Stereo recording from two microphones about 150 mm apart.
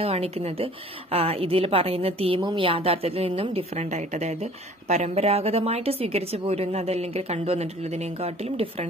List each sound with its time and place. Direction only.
0.0 s a woman's voice: 40° right (ahead or behind)